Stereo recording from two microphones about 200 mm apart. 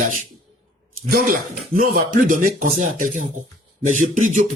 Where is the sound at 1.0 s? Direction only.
45° right (ahead or behind).